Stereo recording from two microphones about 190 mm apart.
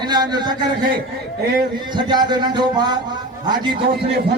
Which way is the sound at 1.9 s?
25° right (ahead or behind).